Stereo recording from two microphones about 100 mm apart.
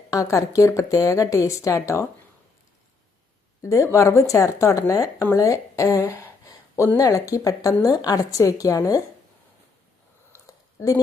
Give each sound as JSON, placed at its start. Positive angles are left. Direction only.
{"t": 0.1, "sound": "speech", "side_deg": 35}
{"t": 3.6, "sound": "speech", "side_deg": 30}